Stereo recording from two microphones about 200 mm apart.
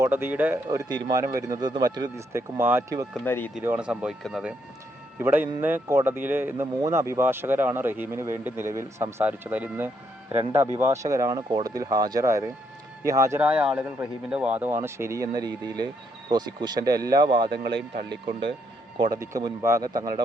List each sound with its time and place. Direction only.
0.0 s a man's voice: 10° right (ahead or behind)
3.2 s speech: 10° left (ahead or behind)
3.5 s a man's voice: 5° right (ahead or behind)